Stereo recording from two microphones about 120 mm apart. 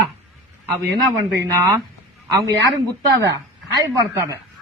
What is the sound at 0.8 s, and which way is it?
A woman's voice, 30° right (ahead or behind).